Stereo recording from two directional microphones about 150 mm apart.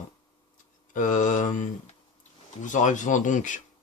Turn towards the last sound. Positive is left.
turn(degrees=55)  # may be behind; listen again after turning